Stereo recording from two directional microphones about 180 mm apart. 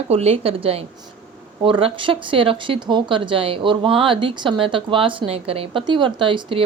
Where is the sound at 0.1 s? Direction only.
35° right (ahead or behind).